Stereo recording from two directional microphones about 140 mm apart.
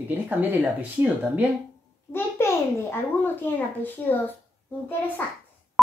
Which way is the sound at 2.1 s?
15° left (ahead or behind).